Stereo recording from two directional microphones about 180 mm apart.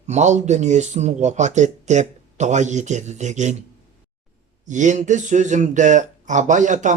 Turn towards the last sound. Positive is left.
turn(degrees=-45)  # may be behind; listen again after turning